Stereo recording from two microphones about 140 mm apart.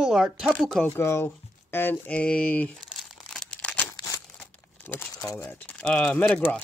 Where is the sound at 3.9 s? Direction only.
25° left (ahead or behind).